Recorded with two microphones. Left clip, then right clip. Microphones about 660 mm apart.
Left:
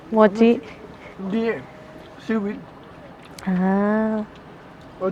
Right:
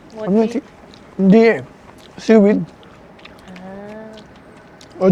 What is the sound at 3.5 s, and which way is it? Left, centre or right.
Speech, left.